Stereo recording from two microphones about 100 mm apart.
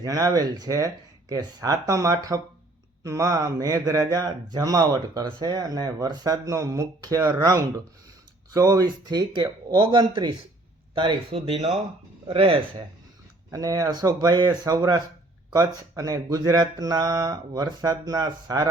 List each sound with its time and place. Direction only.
0.0 s speech: 35° right (ahead or behind); by 11.3 s 55° right (ahead or behind)
11.3 s speech: 90° right
12.3 s speech: 65° right (ahead or behind)
13.5 s speech: 35° right (ahead or behind)